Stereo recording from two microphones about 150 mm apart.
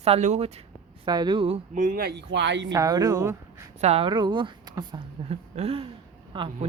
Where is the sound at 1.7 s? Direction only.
65° right (ahead or behind).